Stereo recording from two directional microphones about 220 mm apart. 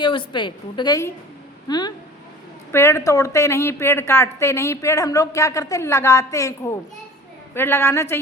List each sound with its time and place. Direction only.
0.0 s a woman's voice: 20° left (ahead or behind)